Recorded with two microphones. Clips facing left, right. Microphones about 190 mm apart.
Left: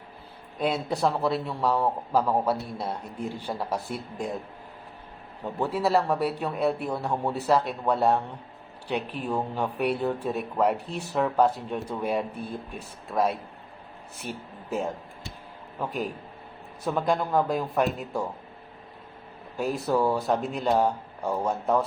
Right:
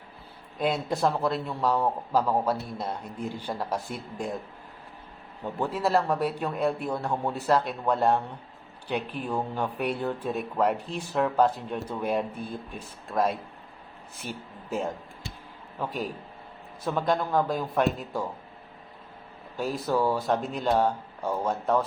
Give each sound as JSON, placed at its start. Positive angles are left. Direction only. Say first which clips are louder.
{"t": 0.6, "sound": "a man's voice", "louder": "even", "side_deg": 5}
{"t": 5.5, "sound": "a man's voice", "louder": "left 1 dB", "side_deg": 10}
{"t": 15.8, "sound": "a man's voice", "louder": "left 1 dB", "side_deg": 5}
{"t": 19.8, "sound": "a man's voice", "louder": "left 1 dB", "side_deg": 10}